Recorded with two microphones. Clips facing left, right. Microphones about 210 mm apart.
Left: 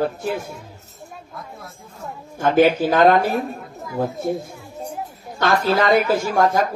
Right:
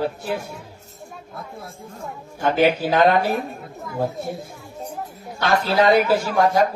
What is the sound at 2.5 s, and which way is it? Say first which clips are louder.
Speech: left 3 dB; 45° left (ahead or behind).